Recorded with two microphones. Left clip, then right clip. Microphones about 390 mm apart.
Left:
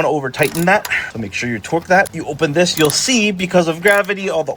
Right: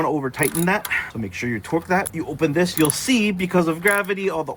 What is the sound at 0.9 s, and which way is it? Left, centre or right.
Speech, centre.